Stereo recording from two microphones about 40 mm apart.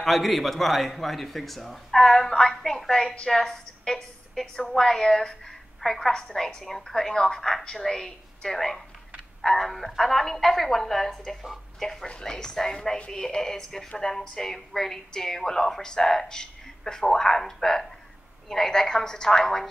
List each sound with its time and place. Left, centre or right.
0.0 s a man's voice: centre; by 6.0 s left
6.2 s a woman's voice: centre
8.5 s a woman's voice: centre